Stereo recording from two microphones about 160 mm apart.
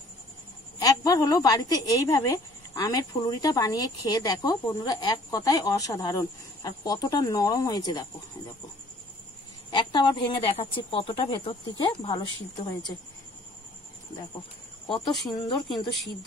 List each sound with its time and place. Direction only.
0.7 s a woman's voice: 20° left (ahead or behind)
9.7 s speech: 30° left (ahead or behind)
15.0 s speech: centre (ahead or behind)
15.3 s a woman's voice: 25° left (ahead or behind)